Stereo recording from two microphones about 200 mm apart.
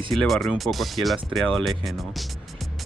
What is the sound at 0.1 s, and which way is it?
Speech, centre (ahead or behind).